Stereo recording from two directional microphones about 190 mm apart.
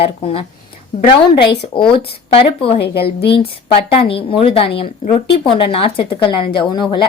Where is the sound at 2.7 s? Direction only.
60° left (ahead or behind).